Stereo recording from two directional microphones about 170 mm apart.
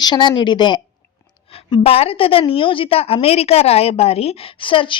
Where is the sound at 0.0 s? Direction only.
25° left (ahead or behind).